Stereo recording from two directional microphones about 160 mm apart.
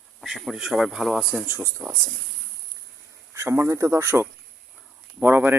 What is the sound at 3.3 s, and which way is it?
Speech, 15° right (ahead or behind).